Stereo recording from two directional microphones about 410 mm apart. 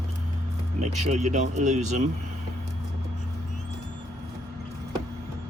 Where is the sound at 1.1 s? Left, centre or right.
Centre.